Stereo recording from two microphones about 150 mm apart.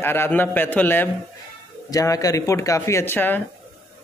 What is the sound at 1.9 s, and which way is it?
Speech, 25° left (ahead or behind).